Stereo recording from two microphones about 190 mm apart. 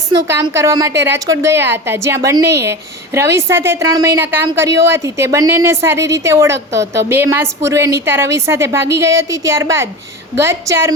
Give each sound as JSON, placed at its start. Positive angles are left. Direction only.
{"t": 0.5, "sound": "a woman's voice", "side_deg": -20}